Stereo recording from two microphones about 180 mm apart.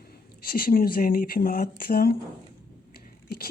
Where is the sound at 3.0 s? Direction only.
55° left (ahead or behind).